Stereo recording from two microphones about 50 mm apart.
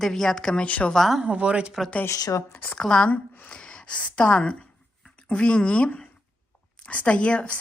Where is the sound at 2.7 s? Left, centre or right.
Centre.